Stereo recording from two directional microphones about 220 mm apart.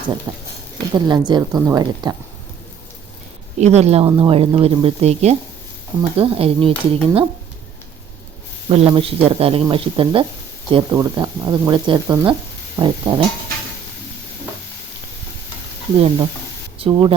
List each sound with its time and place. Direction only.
0.3 s speech: 15° right (ahead or behind)
3.6 s speech: 30° right (ahead or behind)
8.7 s speech: 25° right (ahead or behind)
16.0 s speech: 25° right (ahead or behind)